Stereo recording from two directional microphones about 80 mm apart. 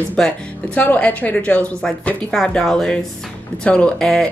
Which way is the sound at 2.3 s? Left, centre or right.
Centre.